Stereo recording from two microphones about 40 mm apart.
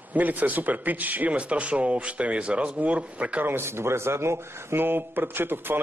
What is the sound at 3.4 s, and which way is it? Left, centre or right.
Speech, right.